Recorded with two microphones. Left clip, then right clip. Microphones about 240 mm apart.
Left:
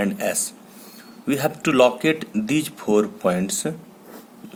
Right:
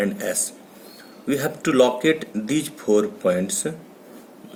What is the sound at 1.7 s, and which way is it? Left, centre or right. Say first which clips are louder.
Speech: even; left.